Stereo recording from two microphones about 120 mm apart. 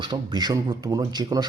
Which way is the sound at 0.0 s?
40° right (ahead or behind).